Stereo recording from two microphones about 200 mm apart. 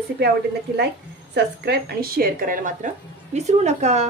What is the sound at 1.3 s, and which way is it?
A woman's voice, 55° right (ahead or behind).